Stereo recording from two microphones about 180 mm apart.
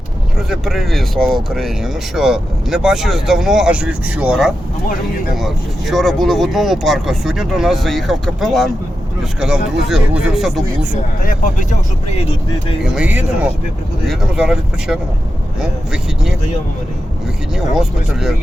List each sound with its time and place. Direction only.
0.3 s speech: centre (ahead or behind)
12.8 s speech: 5° right (ahead or behind)
17.5 s speech: centre (ahead or behind)